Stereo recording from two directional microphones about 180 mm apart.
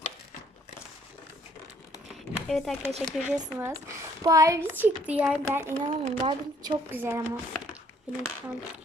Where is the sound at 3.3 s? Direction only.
10° right (ahead or behind).